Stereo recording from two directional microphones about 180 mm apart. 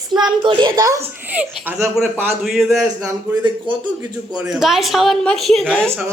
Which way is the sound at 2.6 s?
15° right (ahead or behind).